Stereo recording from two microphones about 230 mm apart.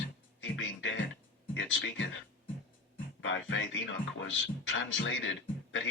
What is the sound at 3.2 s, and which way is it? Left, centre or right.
Speech, left.